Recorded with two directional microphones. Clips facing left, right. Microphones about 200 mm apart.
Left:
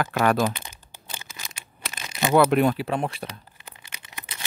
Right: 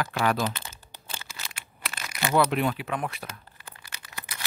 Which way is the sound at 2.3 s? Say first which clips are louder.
Left 6 dB; 45° left (ahead or behind).